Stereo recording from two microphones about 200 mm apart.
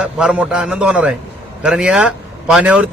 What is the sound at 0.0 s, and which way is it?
A man's voice, 5° right (ahead or behind).